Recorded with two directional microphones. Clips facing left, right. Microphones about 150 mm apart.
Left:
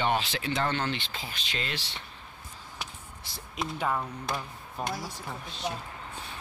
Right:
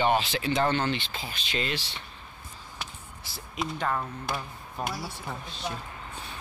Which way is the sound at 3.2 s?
5° right (ahead or behind).